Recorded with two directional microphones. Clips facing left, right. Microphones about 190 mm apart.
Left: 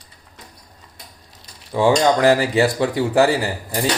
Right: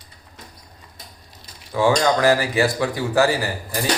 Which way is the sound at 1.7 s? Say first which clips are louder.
Left 2 dB; 20° left (ahead or behind).